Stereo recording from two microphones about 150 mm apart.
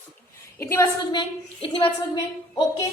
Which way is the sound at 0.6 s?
15° left (ahead or behind).